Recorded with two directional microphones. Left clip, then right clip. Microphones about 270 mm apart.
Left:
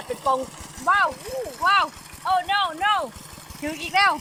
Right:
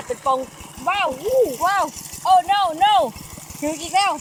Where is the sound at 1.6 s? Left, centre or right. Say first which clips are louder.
Even; centre.